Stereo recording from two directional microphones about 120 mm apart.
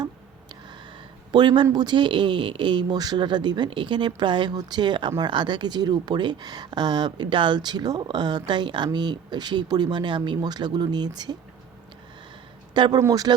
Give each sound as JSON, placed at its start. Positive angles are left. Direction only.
{"t": 0.0, "sound": "a sound", "side_deg": -40}
{"t": 1.3, "sound": "speech", "side_deg": -40}
{"t": 12.7, "sound": "speech", "side_deg": -40}